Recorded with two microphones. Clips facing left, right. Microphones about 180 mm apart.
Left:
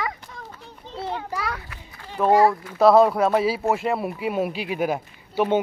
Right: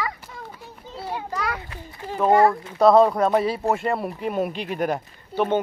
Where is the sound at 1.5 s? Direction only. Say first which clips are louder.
Right 3 dB; 25° right (ahead or behind).